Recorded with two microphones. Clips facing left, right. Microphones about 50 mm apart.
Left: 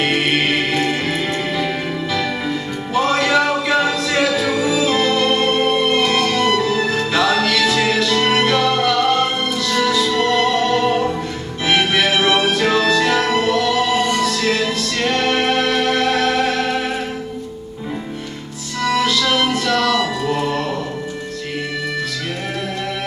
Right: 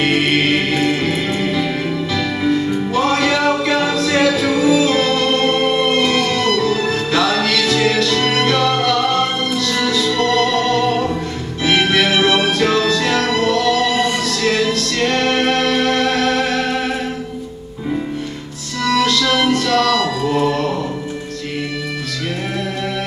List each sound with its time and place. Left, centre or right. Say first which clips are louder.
0.0 s music: right 2 dB; centre
18.9 s music: right 2 dB; centre